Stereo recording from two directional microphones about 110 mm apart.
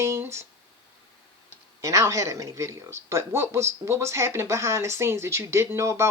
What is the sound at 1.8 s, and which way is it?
Speech, 30° right (ahead or behind).